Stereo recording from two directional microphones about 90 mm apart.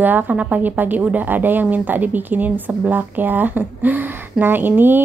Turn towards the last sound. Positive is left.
turn(degrees=-20)  # may be behind; listen again after turning